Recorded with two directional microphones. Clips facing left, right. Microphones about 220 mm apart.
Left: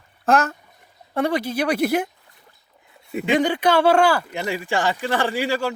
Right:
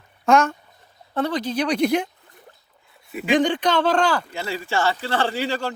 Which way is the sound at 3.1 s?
25° left (ahead or behind).